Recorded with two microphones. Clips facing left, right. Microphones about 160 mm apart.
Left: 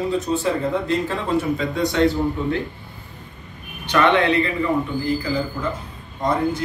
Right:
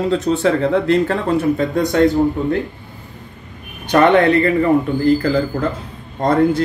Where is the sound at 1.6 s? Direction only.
50° right (ahead or behind).